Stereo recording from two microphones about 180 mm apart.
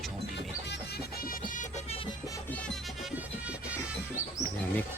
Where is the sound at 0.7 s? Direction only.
55° left (ahead or behind).